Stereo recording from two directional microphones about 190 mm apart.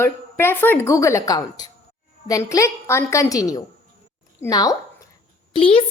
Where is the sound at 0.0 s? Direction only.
15° left (ahead or behind).